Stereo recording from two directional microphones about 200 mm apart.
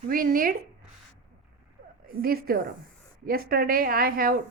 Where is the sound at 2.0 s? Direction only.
50° right (ahead or behind).